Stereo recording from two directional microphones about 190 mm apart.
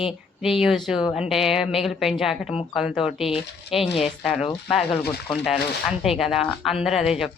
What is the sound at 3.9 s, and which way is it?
Speech, 30° left (ahead or behind).